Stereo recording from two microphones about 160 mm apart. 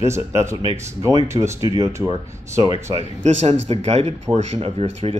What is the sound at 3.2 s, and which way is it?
Speech, 45° right (ahead or behind).